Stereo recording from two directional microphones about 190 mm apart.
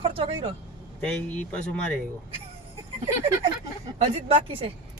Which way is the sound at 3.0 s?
30° right (ahead or behind).